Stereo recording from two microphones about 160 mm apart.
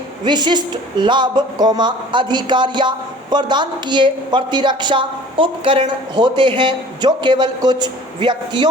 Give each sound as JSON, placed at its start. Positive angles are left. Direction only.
{"t": 0.3, "sound": "a woman's voice", "side_deg": -30}